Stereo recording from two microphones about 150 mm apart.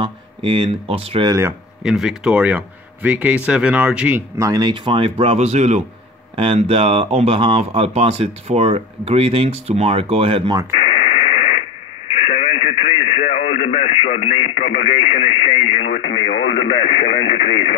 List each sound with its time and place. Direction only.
0.0 s speech: 35° right (ahead or behind)
1.8 s speech: 5° right (ahead or behind)
4.4 s speech: 25° right (ahead or behind)
10.8 s radio: 35° left (ahead or behind)
15.9 s speech: 90° left